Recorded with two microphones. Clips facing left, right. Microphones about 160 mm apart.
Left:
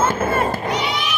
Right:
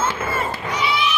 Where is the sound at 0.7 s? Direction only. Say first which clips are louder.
Left 1 dB; 65° left (ahead or behind).